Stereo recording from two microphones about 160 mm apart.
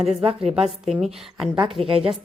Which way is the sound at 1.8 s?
35° right (ahead or behind).